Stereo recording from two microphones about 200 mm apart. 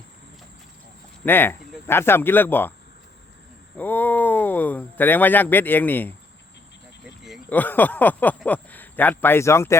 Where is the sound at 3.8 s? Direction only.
10° left (ahead or behind).